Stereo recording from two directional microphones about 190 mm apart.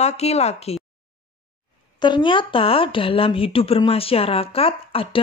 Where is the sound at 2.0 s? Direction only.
25° left (ahead or behind).